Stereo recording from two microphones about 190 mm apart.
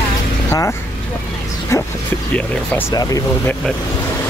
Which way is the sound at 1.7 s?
15° left (ahead or behind).